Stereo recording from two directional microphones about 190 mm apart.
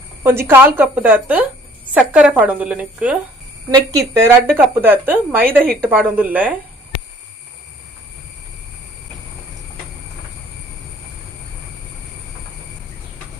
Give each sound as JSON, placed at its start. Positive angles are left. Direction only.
{"t": 0.2, "sound": "a woman's voice", "side_deg": -10}
{"t": 3.7, "sound": "a woman's voice", "side_deg": -15}